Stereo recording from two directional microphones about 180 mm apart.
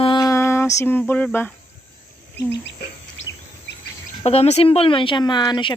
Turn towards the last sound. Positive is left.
turn(degrees=25)  # may be behind; listen again after turning